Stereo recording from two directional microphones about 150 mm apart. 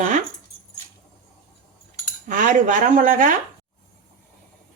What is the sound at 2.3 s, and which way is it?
Speech, 60° right (ahead or behind).